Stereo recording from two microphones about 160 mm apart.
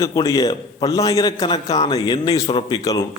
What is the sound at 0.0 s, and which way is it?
A man's voice, 25° left (ahead or behind).